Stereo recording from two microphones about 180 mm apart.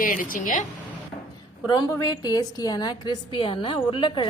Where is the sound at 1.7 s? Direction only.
20° left (ahead or behind).